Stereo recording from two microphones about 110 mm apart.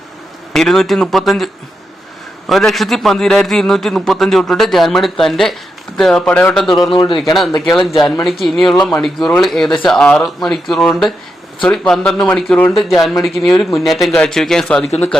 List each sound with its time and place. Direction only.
0.5 s a man's voice: 5° left (ahead or behind)
2.5 s a man's voice: centre (ahead or behind)
6.9 s a man's voice: 45° left (ahead or behind)
7.6 s a man's voice: centre (ahead or behind)